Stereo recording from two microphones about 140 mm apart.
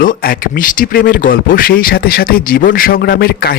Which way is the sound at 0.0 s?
85° left.